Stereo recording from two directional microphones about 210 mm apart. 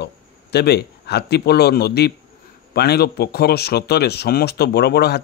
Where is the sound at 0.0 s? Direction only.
50° left (ahead or behind).